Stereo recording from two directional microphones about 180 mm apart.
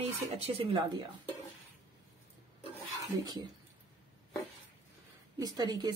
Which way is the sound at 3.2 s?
20° right (ahead or behind).